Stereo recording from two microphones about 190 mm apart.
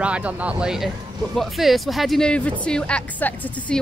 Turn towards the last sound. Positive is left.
turn(degrees=10)  # may be behind; listen again after turning